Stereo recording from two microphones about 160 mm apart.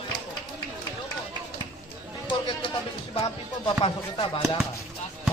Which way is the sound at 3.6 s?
35° left (ahead or behind).